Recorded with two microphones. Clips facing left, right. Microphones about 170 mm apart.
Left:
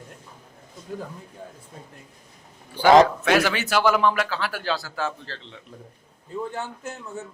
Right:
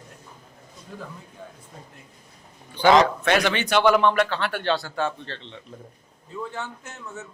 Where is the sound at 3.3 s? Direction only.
5° left (ahead or behind).